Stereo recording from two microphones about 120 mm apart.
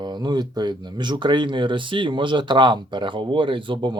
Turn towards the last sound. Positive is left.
turn(degrees=-45)  # may be behind; listen again after turning